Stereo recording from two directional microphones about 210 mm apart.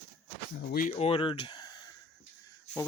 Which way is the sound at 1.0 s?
25° left (ahead or behind).